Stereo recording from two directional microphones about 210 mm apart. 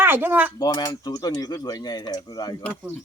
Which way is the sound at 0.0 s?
10° right (ahead or behind).